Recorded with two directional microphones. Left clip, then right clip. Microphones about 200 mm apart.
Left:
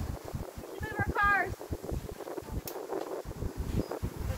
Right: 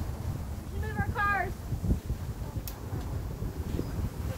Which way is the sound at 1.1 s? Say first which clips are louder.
Left 2 dB; 25° right (ahead or behind).